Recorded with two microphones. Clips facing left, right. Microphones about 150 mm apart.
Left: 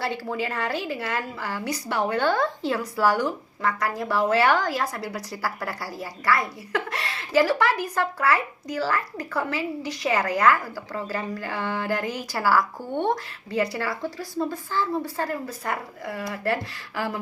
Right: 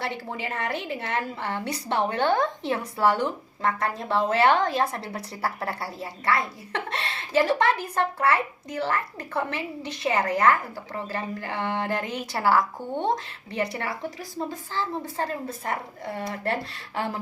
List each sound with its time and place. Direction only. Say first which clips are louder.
0.0 s a woman's voice: left 4 dB; 20° right (ahead or behind)